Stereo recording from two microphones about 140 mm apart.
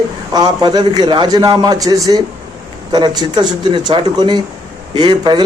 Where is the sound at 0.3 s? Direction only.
30° right (ahead or behind).